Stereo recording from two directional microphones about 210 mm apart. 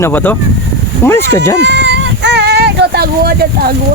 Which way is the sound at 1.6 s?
55° right (ahead or behind).